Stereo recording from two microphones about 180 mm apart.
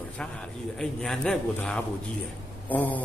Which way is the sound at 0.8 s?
Centre (ahead or behind).